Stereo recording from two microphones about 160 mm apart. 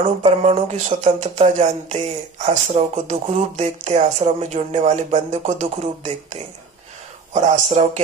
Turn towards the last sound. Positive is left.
turn(degrees=-50)  # may be behind; listen again after turning